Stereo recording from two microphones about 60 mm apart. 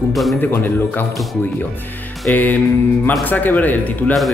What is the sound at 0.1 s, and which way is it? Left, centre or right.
Speech, centre.